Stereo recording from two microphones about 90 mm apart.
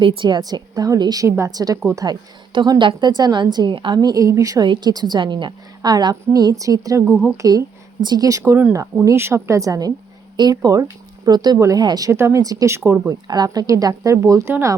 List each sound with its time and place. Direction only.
0.0 s a woman's voice: 70° right (ahead or behind); by 1.8 s 45° right (ahead or behind)
2.0 s a woman's voice: 55° right (ahead or behind); by 4.6 s 40° right (ahead or behind)
4.6 s a woman's voice: 55° right (ahead or behind); by 7.0 s 40° right (ahead or behind)
7.1 s speech: 20° right (ahead or behind)
8.0 s a woman's voice: 45° right (ahead or behind)
12.1 s speech: 25° right (ahead or behind)
12.4 s a woman's voice: 40° right (ahead or behind)
12.7 s speech: 30° right (ahead or behind)
13.2 s a woman's voice: 50° right (ahead or behind); by 14.5 s 35° right (ahead or behind)